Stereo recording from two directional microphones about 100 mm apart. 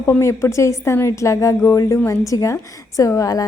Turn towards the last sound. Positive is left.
turn(degrees=35)  # may be behind; listen again after turning